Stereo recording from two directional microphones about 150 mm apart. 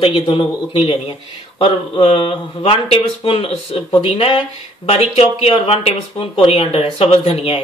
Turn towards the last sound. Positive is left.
turn(degrees=40)  # may be behind; listen again after turning